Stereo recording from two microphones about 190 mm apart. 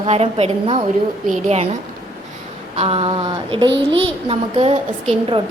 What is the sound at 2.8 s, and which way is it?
A woman's voice, 30° right (ahead or behind).